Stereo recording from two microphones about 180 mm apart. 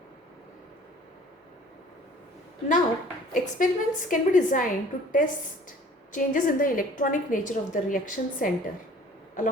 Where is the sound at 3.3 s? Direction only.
45° left (ahead or behind).